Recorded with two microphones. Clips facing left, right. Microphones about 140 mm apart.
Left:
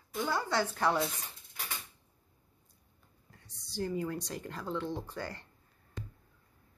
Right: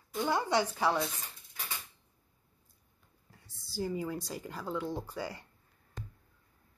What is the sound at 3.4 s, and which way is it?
Speech, 5° right (ahead or behind).